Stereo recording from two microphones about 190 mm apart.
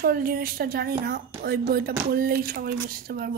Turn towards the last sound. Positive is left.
turn(degrees=-50)  # may be behind; listen again after turning